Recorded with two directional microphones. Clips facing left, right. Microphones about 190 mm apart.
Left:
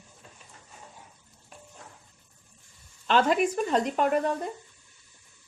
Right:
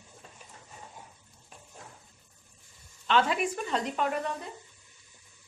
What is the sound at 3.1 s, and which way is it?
Speech, 45° left (ahead or behind).